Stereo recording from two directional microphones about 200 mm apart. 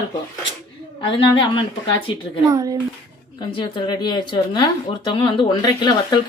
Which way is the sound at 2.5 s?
20° right (ahead or behind).